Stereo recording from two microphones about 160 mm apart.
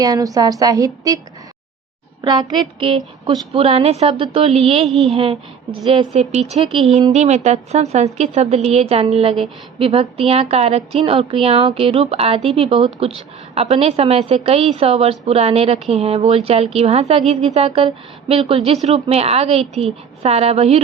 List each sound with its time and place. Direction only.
0.0 s a woman's voice: 20° right (ahead or behind)
2.2 s a woman's voice: 25° right (ahead or behind)
4.9 s a woman's voice: centre (ahead or behind)
5.1 s a woman's voice: 35° right (ahead or behind)